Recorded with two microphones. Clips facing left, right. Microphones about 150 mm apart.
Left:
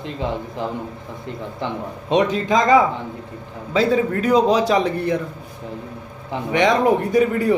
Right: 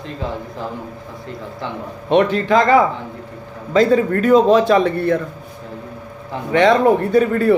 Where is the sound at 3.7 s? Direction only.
10° left (ahead or behind).